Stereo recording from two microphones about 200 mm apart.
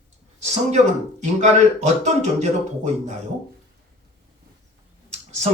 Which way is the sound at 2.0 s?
35° right (ahead or behind).